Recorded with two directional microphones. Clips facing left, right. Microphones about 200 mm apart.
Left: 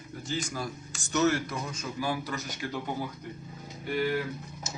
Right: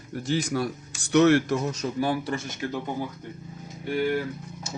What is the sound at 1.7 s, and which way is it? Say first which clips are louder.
A man's voice: right 6 dB; 35° right (ahead or behind).